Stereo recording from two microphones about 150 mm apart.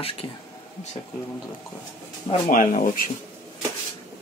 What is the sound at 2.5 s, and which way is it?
Speech, 60° left (ahead or behind).